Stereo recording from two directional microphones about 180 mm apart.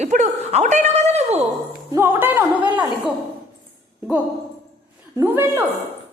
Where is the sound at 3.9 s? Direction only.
10° right (ahead or behind).